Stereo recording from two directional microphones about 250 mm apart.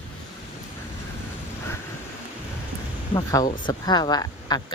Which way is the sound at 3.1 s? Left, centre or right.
Centre.